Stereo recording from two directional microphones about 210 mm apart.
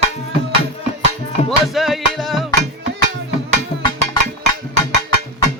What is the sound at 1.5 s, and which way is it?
Music, centre (ahead or behind).